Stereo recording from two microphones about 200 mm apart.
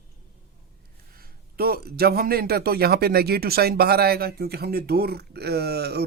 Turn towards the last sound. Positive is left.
turn(degrees=-55)  # may be behind; listen again after turning